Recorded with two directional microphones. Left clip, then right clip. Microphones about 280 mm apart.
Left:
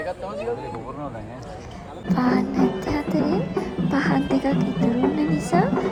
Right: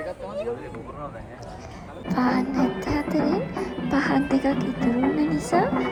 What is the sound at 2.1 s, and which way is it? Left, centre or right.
Music, centre.